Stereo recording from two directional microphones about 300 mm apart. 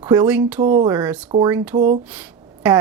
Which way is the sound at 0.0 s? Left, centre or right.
Centre.